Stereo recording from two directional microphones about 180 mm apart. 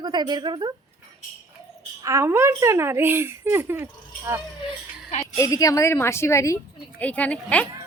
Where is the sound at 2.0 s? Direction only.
15° right (ahead or behind).